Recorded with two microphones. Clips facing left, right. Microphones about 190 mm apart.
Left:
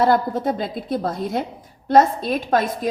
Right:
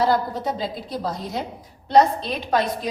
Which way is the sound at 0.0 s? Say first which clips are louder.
Left 3 dB; 55° left (ahead or behind).